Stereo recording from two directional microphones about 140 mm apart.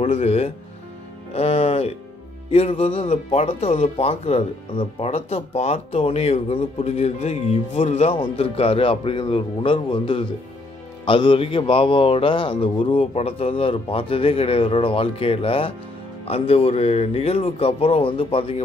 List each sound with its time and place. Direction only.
0.0 s speech: 50° left (ahead or behind)
1.3 s music: 45° left (ahead or behind)
2.5 s a man's voice: 45° left (ahead or behind)